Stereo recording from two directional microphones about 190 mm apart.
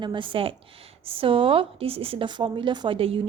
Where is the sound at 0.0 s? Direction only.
25° right (ahead or behind).